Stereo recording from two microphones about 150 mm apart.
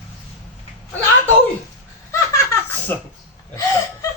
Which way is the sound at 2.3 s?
20° left (ahead or behind).